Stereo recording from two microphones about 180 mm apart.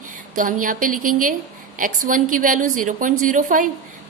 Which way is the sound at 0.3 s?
45° right (ahead or behind).